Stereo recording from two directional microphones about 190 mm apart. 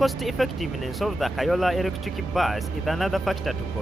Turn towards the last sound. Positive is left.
turn(degrees=0)  # may be behind; listen again after turning